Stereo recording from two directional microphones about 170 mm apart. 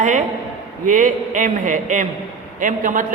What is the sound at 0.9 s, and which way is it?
A woman's voice, 50° right (ahead or behind).